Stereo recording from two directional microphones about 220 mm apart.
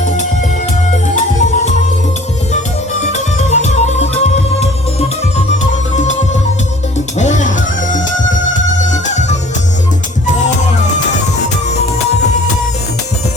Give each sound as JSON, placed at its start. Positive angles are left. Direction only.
{"t": 0.0, "sound": "music", "side_deg": 35}
{"t": 3.3, "sound": "music", "side_deg": 30}
{"t": 7.2, "sound": "music", "side_deg": 35}